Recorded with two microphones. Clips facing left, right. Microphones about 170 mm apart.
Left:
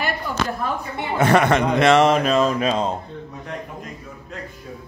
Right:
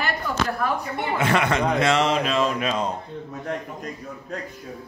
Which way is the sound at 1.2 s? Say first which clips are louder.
Left 6 dB; 45° left (ahead or behind).